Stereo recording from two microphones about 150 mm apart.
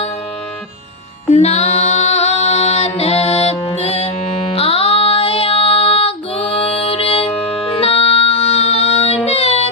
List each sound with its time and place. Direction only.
1.3 s female singing: 45° left (ahead or behind)
7.7 s music: 40° left (ahead or behind)